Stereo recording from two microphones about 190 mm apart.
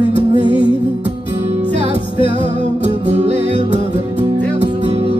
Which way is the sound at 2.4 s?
25° left (ahead or behind).